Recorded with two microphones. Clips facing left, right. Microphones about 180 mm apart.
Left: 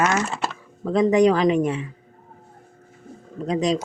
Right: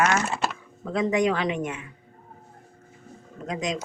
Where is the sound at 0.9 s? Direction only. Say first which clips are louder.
Left 7 dB; 35° left (ahead or behind).